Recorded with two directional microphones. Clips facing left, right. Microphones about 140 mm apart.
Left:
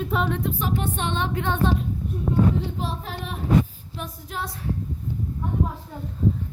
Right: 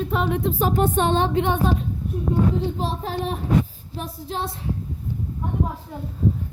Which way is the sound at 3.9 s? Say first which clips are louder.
Right 4 dB; 30° right (ahead or behind).